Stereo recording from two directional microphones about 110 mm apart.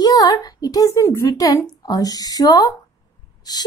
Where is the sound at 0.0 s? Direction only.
35° left (ahead or behind).